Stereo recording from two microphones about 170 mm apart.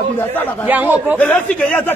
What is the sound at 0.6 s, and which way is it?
Speech, 10° right (ahead or behind).